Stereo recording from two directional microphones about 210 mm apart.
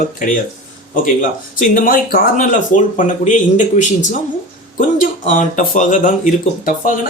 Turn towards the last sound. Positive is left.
turn(degrees=40)  # may be behind; listen again after turning